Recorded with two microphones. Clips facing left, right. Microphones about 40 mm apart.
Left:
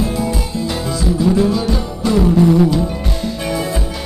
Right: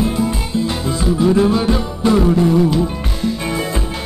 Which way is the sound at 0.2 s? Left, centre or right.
Centre.